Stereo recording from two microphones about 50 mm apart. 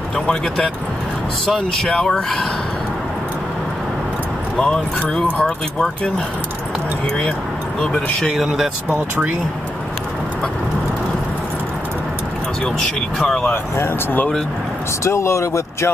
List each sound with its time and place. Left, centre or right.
1.4 s speech: centre
4.6 s speech: centre
8.2 s speech: centre
12.6 s speech: centre
15.0 s speech: left